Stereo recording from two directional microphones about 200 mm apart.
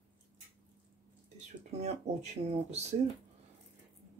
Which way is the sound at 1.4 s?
35° right (ahead or behind).